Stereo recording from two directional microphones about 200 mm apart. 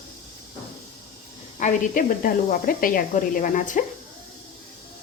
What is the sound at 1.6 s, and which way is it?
Speech, 40° left (ahead or behind).